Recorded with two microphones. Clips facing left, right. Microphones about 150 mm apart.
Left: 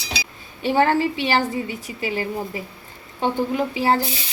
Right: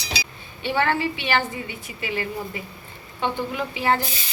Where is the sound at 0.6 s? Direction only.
40° left (ahead or behind).